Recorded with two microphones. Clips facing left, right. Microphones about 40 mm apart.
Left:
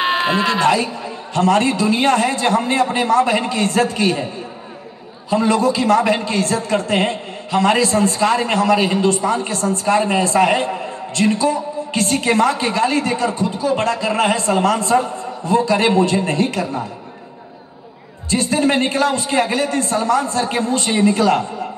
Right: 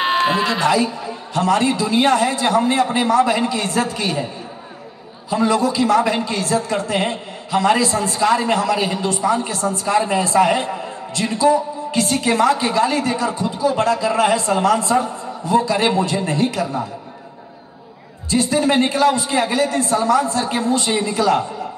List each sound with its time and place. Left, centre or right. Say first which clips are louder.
0.0 s a sound: even; centre
0.5 s a man's voice: left 1 dB; left
5.3 s a man's voice: left 2 dB; left
18.3 s a man's voice: even; left